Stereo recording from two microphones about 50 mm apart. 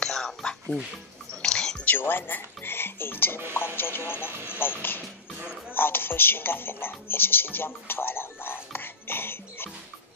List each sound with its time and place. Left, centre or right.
0.0 s a sound: centre
1.3 s whispering: centre
1.9 s speech: left